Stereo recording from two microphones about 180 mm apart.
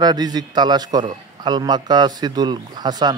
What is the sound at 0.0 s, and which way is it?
A man's voice, 25° right (ahead or behind).